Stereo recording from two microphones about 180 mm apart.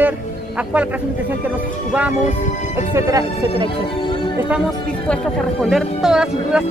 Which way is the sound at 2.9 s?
15° right (ahead or behind).